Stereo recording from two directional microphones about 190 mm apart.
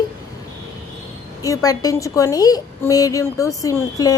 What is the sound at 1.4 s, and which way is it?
A child's voice, 20° left (ahead or behind).